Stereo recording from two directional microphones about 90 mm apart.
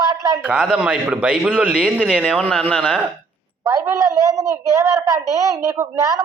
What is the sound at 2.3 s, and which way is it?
Speech, 5° left (ahead or behind).